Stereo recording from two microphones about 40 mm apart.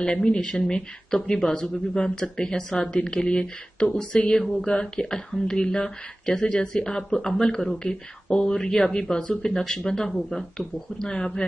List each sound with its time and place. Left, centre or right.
0.0 s speech: centre
11.1 s speech: left